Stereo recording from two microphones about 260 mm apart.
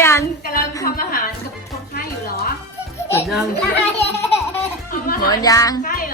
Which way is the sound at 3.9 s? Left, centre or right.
Left.